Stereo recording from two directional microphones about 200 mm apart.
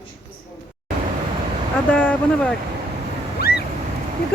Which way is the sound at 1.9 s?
10° left (ahead or behind).